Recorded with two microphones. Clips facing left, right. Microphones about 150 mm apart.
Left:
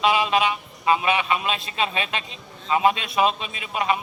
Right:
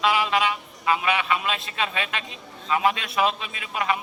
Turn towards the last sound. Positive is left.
turn(degrees=20)  # may be behind; listen again after turning